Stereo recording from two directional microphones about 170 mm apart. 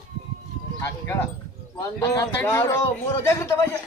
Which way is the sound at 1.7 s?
20° left (ahead or behind).